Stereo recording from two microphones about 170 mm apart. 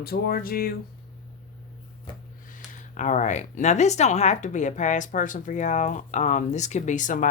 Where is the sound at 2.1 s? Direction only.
30° left (ahead or behind).